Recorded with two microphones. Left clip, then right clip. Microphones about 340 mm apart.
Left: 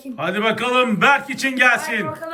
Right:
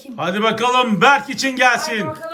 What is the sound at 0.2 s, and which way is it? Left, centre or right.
A man's voice, centre.